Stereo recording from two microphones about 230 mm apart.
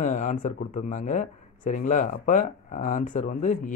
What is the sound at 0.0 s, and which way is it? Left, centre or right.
Speech, left.